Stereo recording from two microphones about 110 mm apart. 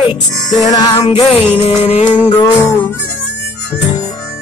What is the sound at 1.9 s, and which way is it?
Music, 90° left.